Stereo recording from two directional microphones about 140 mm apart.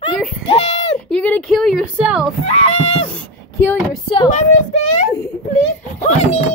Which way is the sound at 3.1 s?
15° left (ahead or behind).